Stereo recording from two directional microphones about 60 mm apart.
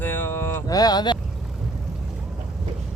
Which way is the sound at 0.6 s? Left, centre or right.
Left.